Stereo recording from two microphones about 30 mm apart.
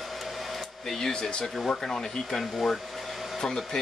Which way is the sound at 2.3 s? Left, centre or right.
Centre.